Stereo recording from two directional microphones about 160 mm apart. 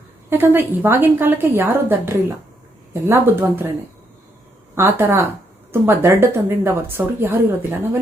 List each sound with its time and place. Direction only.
0.3 s speech: 15° right (ahead or behind)
4.7 s speech: 15° right (ahead or behind)